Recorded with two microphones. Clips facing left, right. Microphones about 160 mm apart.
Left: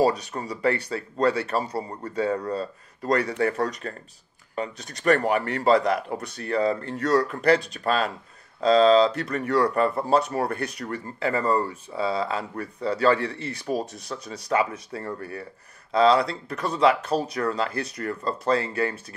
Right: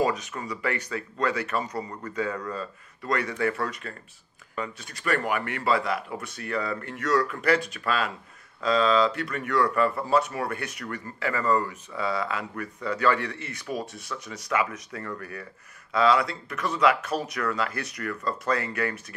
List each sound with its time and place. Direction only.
0.0 s speech: 35° left (ahead or behind)